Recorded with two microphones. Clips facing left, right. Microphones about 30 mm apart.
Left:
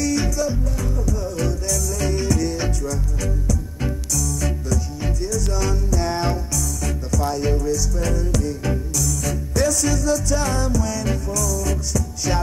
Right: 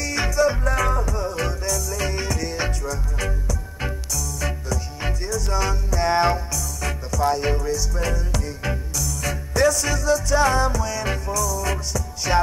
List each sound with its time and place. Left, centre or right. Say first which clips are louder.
0.0 s music: right 1 dB; right